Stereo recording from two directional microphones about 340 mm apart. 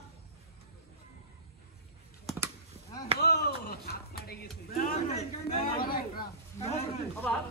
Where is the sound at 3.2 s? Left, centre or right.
Left.